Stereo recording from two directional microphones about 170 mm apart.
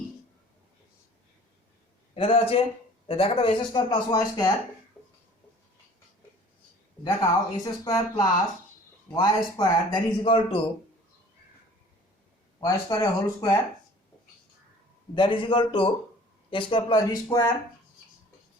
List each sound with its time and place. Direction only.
2.1 s speech: 35° left (ahead or behind)
7.0 s a man's voice: 20° left (ahead or behind)
12.5 s a man's voice: 20° left (ahead or behind)
15.1 s a man's voice: 30° left (ahead or behind)